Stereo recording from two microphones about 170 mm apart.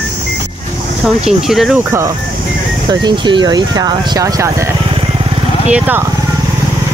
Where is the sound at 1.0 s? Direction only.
Centre (ahead or behind).